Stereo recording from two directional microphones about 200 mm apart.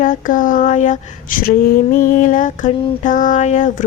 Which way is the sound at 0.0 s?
40° left (ahead or behind).